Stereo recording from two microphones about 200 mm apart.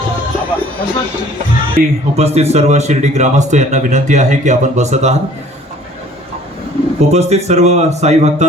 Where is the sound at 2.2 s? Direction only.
30° right (ahead or behind).